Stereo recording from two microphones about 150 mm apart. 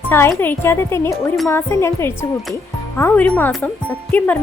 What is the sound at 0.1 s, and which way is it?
A woman's voice, 15° left (ahead or behind).